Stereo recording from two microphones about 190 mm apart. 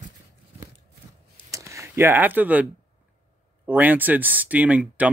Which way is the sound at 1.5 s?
15° right (ahead or behind).